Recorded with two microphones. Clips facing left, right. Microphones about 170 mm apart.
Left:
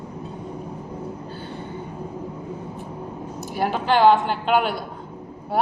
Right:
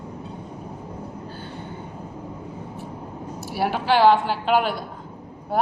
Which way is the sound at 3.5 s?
5° right (ahead or behind).